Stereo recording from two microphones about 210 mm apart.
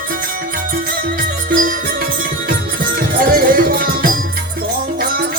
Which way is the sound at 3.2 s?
45° right (ahead or behind).